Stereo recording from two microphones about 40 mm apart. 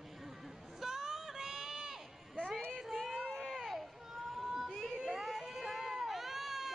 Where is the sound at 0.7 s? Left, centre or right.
Centre.